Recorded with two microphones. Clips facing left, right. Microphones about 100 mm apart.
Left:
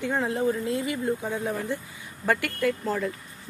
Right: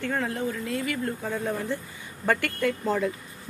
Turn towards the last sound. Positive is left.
turn(degrees=0)  # may be behind; listen again after turning